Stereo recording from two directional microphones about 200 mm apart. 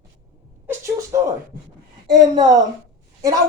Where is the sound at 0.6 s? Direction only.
15° right (ahead or behind).